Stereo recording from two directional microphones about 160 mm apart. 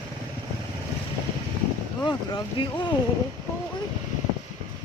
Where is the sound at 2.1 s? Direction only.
30° left (ahead or behind).